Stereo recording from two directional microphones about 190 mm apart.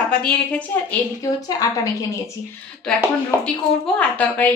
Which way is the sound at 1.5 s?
20° left (ahead or behind).